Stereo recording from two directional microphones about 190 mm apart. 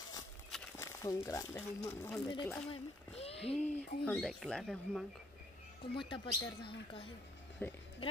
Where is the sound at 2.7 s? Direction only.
30° left (ahead or behind).